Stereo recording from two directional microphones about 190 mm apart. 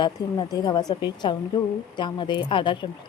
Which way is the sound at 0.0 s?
25° left (ahead or behind).